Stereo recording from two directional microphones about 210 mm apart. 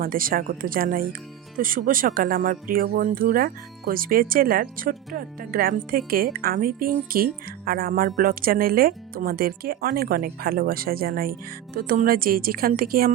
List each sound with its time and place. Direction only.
0.0 s speech: 40° right (ahead or behind)